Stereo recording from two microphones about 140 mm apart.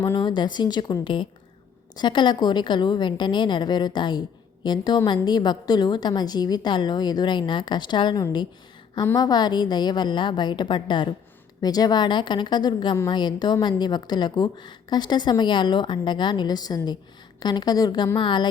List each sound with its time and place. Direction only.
0.0 s a woman's voice: 30° left (ahead or behind)